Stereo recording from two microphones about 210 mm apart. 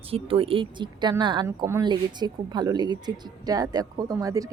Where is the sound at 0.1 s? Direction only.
25° right (ahead or behind).